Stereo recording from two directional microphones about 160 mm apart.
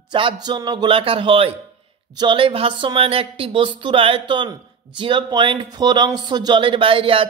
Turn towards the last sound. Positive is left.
turn(degrees=-35)  # may be behind; listen again after turning